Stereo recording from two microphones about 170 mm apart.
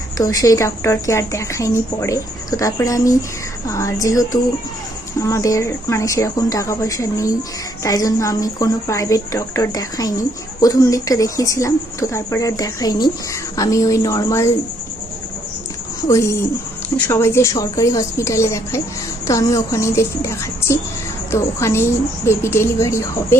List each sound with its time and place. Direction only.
0.2 s a woman's voice: 20° left (ahead or behind)
16.0 s a woman's voice: 15° left (ahead or behind)